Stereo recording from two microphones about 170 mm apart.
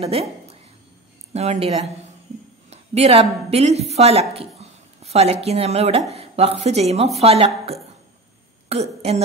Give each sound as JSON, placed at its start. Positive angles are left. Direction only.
{"t": 0.0, "sound": "a woman's voice", "side_deg": -35}